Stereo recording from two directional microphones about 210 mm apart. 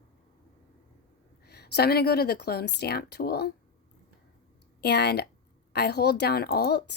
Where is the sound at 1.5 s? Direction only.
50° left (ahead or behind).